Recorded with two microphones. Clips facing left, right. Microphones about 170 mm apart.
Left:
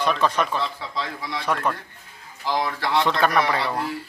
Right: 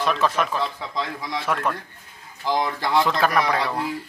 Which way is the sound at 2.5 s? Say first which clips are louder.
Right 1 dB; 20° right (ahead or behind).